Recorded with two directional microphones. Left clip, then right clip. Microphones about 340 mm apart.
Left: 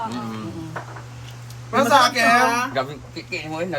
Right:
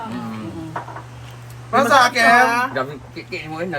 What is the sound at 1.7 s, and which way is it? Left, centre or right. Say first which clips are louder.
Speech: right 2 dB; centre.